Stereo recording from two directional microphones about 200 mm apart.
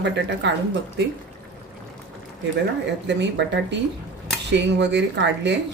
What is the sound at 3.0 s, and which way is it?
Speech, 60° right (ahead or behind).